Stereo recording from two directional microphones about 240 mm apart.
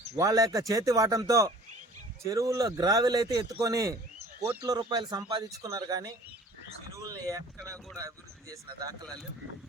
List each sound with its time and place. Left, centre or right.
0.2 s speech: centre